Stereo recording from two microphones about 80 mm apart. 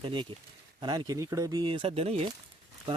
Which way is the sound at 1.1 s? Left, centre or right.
Right.